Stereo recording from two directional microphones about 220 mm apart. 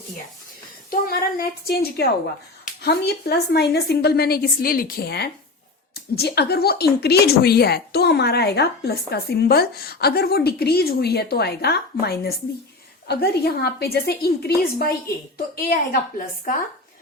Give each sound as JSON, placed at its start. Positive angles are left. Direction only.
{"t": 0.9, "sound": "a woman's voice", "side_deg": 45}